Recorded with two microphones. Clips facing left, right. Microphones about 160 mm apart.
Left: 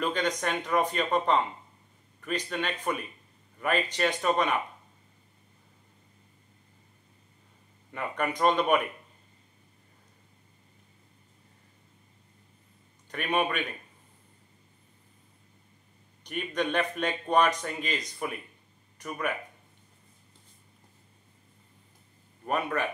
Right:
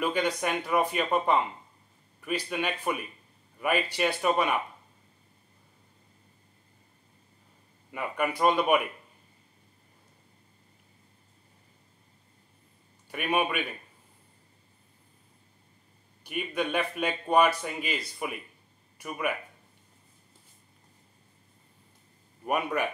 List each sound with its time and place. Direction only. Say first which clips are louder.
0.0 s speech: right 1 dB; 10° right (ahead or behind)
7.9 s speech: right 1 dB; 10° right (ahead or behind)
13.1 s speech: even; 10° right (ahead or behind)
16.3 s speech: even; 5° right (ahead or behind)
22.4 s speech: right 1 dB; 15° right (ahead or behind)